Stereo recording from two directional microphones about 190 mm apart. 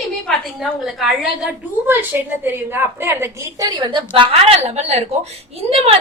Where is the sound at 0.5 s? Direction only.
Centre (ahead or behind).